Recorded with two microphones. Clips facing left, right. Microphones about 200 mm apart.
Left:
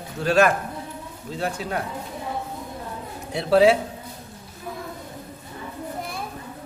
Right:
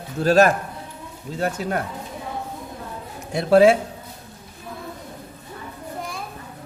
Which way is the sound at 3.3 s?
45° right (ahead or behind).